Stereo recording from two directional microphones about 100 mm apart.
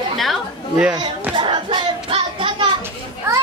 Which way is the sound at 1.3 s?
55° right (ahead or behind).